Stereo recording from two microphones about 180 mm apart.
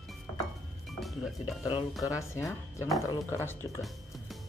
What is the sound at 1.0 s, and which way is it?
Speech, centre (ahead or behind).